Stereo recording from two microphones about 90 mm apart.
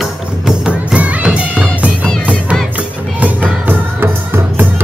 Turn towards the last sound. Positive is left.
turn(degrees=-20)  # may be behind; listen again after turning